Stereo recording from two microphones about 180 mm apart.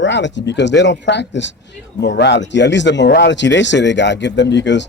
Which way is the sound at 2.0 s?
70° left (ahead or behind).